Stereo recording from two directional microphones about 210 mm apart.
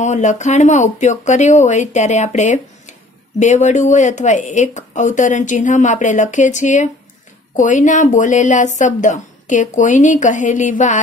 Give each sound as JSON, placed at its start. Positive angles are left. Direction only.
{"t": 0.0, "sound": "speech", "side_deg": 35}